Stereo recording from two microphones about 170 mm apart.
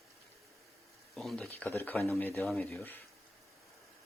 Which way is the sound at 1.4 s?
10° left (ahead or behind).